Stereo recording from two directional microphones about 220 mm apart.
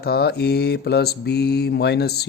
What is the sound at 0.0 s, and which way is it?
Speech, 45° left (ahead or behind).